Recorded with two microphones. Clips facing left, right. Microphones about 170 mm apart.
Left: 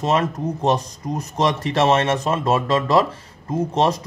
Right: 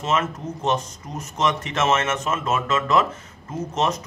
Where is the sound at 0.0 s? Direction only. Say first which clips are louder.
Left 4 dB; 35° left (ahead or behind).